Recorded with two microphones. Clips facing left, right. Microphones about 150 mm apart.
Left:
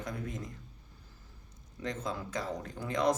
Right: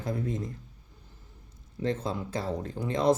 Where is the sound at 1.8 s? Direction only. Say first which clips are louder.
Right 6 dB; 30° right (ahead or behind).